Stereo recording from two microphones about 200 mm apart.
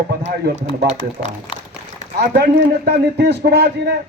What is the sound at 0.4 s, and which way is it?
Speech, 55° right (ahead or behind).